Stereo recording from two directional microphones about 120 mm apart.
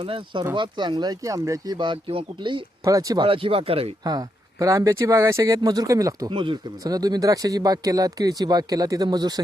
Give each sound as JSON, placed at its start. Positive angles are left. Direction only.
{"t": 0.0, "sound": "speech", "side_deg": -45}
{"t": 2.8, "sound": "speech", "side_deg": -30}
{"t": 3.2, "sound": "speech", "side_deg": -50}
{"t": 4.0, "sound": "speech", "side_deg": -30}
{"t": 6.3, "sound": "speech", "side_deg": -45}